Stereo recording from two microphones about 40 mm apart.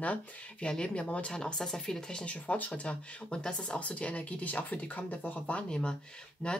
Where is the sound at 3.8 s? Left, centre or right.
Left.